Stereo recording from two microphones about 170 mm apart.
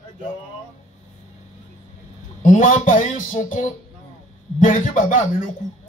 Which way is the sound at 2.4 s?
50° left (ahead or behind).